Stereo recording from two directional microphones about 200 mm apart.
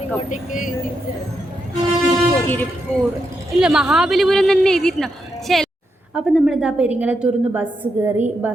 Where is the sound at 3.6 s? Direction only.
5° right (ahead or behind).